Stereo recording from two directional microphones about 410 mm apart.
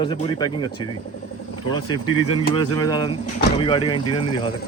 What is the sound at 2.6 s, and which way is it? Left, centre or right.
Speech, centre.